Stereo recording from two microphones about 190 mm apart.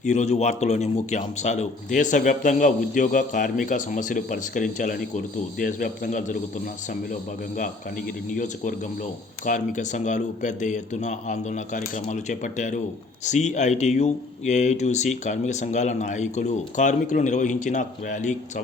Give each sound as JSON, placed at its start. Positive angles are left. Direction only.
{"t": 0.0, "sound": "a man's voice", "side_deg": 40}